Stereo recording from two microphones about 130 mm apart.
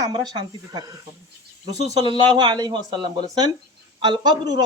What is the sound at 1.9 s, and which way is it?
Speech, 35° right (ahead or behind).